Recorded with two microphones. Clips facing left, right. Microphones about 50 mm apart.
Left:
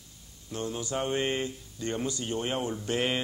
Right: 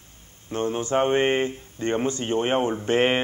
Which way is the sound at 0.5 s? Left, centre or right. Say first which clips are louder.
Right 9 dB; right.